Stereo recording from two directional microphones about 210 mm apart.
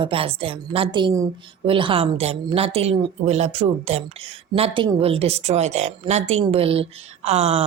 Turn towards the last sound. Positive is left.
turn(degrees=-30)  # may be behind; listen again after turning